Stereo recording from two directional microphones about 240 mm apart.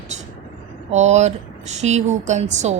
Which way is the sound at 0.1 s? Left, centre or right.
Right.